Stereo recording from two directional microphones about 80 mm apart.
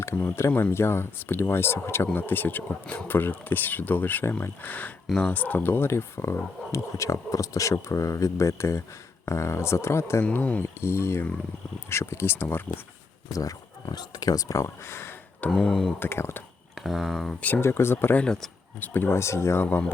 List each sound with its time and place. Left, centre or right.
0.0 s speech: left
5.0 s speech: centre; by 10.2 s left
10.3 s speech: centre
10.8 s speech: left
13.3 s speech: left
15.4 s speech: centre
16.0 s speech: left
16.7 s speech: centre
17.4 s speech: left
18.2 s speech: centre
18.8 s speech: left